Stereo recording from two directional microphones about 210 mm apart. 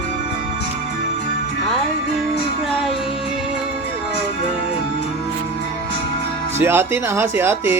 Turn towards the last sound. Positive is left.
turn(degrees=-10)  # may be behind; listen again after turning